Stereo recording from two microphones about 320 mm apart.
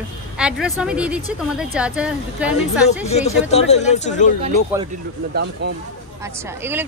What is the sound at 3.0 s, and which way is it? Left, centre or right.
Speech, centre.